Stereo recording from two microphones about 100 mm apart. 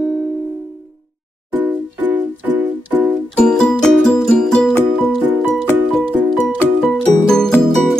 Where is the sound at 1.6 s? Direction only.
15° right (ahead or behind).